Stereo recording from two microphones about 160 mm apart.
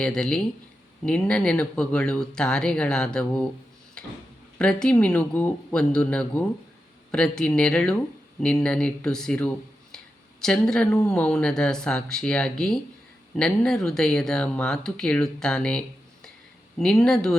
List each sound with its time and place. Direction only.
0.0 s speech: 5° left (ahead or behind)
4.5 s speech: 5° left (ahead or behind)